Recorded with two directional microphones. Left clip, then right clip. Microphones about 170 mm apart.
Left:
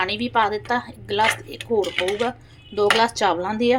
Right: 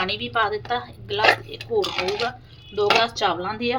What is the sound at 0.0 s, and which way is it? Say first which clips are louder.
Speech: left 2 dB; 25° left (ahead or behind).